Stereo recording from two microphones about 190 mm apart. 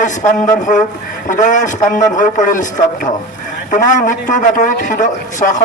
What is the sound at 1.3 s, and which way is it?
A man's voice, 40° left (ahead or behind).